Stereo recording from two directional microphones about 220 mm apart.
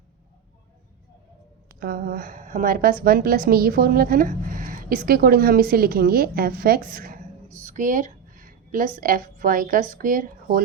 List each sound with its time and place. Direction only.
1.8 s a woman's voice: 40° right (ahead or behind)